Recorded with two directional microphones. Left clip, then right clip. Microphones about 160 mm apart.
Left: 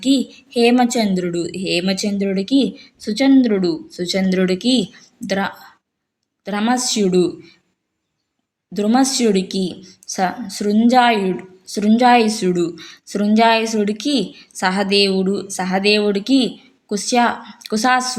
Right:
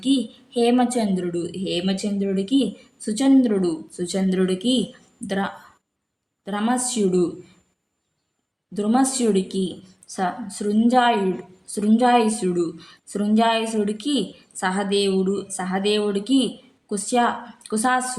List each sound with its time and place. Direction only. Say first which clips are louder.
0.0 s a woman's voice: left 5 dB; 20° left (ahead or behind)
8.7 s a woman's voice: left 5 dB; 20° left (ahead or behind)